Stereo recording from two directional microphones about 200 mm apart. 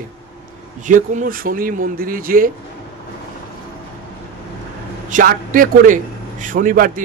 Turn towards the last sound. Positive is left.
turn(degrees=-45)  # may be behind; listen again after turning